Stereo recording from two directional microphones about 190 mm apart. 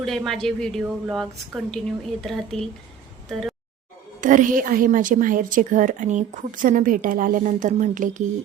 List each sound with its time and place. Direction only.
0.0 s a woman's voice: centre (ahead or behind)
4.2 s a woman's voice: 45° right (ahead or behind)